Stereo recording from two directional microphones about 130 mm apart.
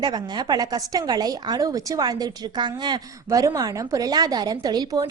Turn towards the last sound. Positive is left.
turn(degrees=-30)  # may be behind; listen again after turning